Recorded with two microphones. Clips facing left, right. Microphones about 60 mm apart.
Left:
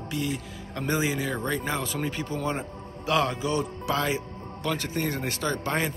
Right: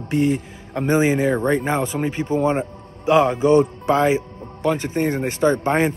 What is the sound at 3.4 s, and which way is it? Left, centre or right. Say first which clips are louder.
Speech: right 13 dB; right.